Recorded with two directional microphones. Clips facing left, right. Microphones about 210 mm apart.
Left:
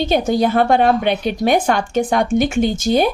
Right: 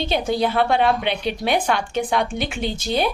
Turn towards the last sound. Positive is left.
turn(degrees=45)  # may be behind; listen again after turning